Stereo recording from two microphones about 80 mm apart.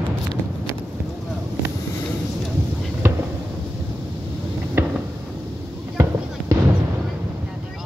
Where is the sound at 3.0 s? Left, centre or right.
Right.